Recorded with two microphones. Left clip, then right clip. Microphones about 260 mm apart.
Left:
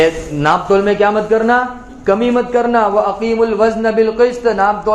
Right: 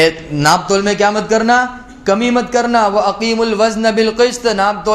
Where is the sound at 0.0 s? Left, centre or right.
Right.